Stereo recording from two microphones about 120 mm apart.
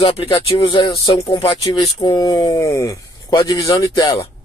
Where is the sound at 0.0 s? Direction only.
50° left (ahead or behind).